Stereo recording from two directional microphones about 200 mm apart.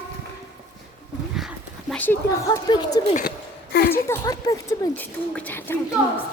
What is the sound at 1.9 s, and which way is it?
Speech, 10° left (ahead or behind).